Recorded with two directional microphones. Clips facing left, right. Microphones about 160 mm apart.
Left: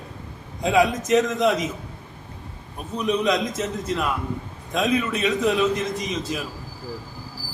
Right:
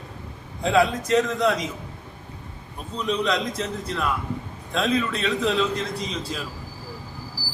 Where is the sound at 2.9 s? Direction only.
15° left (ahead or behind).